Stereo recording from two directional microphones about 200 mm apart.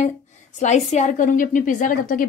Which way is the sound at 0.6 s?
35° left (ahead or behind).